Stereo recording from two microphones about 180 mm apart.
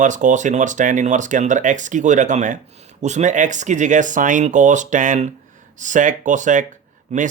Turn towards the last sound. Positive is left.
turn(degrees=-40)  # may be behind; listen again after turning